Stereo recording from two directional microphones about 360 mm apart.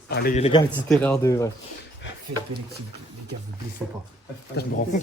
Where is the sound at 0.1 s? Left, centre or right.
Left.